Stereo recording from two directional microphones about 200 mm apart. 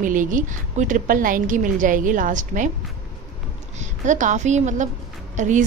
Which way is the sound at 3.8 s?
40° right (ahead or behind).